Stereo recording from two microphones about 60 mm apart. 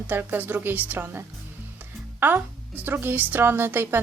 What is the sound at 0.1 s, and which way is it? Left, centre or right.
Speech, right.